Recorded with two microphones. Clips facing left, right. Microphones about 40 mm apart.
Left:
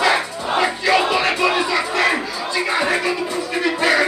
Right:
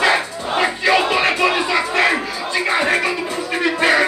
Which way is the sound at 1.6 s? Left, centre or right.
Right.